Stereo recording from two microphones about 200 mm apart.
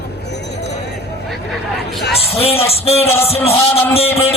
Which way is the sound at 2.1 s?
30° left (ahead or behind).